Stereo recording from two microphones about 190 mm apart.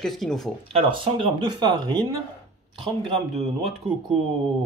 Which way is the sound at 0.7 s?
25° right (ahead or behind).